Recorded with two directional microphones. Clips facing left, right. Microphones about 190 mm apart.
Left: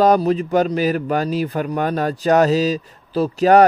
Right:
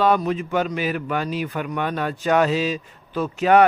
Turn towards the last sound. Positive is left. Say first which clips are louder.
# left 4 dB
turn(degrees=40)  # may be behind; listen again after turning